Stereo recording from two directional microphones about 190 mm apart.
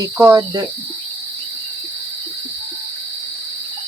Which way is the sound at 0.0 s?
15° right (ahead or behind).